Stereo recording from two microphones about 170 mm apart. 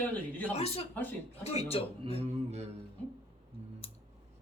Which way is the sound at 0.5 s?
40° left (ahead or behind).